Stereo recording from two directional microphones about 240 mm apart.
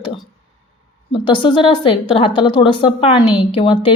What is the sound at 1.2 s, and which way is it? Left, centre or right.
A woman's voice, left.